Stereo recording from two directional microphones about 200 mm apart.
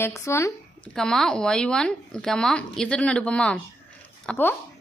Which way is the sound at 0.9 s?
5° left (ahead or behind).